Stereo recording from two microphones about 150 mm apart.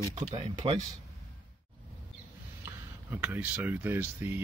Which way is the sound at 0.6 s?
30° right (ahead or behind).